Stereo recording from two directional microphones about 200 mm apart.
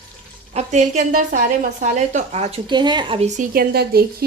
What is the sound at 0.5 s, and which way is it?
A woman's voice, 35° right (ahead or behind).